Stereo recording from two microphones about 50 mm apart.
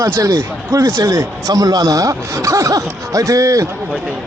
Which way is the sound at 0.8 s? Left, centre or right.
Right.